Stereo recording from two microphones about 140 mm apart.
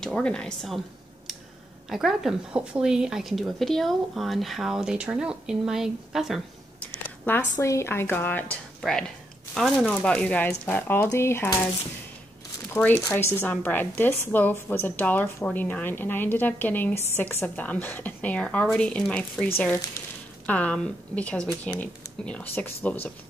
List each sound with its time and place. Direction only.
0.0 s speech: 5° left (ahead or behind)
1.9 s speech: centre (ahead or behind)
6.9 s a sound: 15° left (ahead or behind)
7.5 s a woman's voice: 20° left (ahead or behind)
12.7 s a woman's voice: 10° left (ahead or behind)